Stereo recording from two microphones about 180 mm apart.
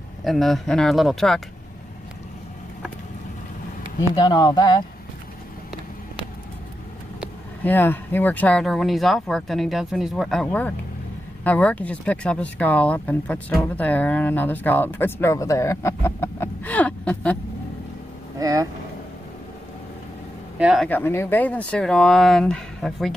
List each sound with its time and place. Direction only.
0.2 s speech: centre (ahead or behind)
4.1 s speech: 25° left (ahead or behind)
7.6 s speech: 10° left (ahead or behind)
18.4 s speech: 20° right (ahead or behind)
20.5 s speech: 5° right (ahead or behind)
20.9 s speech: 10° left (ahead or behind)